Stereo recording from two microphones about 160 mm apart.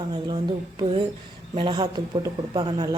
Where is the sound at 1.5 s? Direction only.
30° right (ahead or behind).